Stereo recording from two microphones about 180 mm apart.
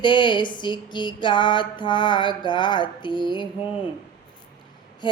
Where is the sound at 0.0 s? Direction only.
25° left (ahead or behind).